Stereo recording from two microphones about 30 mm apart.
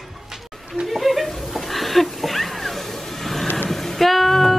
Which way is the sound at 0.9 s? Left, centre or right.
Centre.